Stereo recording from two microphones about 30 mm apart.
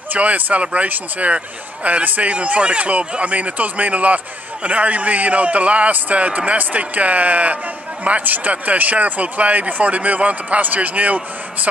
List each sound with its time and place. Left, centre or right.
0.1 s a man's voice: right
0.8 s speech: right
1.3 s a man's voice: right
8.5 s speech: right